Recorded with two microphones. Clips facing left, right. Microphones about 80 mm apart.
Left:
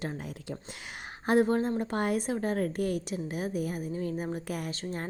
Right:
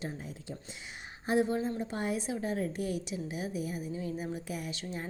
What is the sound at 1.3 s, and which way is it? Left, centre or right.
A woman's voice, left.